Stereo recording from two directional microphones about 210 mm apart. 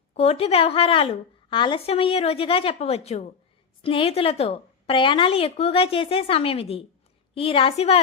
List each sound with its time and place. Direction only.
0.1 s a woman's voice: 30° left (ahead or behind)